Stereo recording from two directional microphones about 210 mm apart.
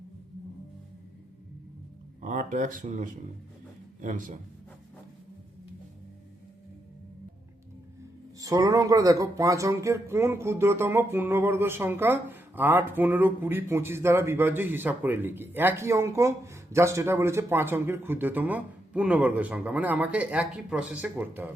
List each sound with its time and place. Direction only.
2.2 s speech: 40° right (ahead or behind)
8.4 s speech: 15° right (ahead or behind)